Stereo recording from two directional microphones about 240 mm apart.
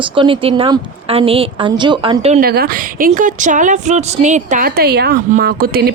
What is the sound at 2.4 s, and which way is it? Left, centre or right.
A woman's voice, right.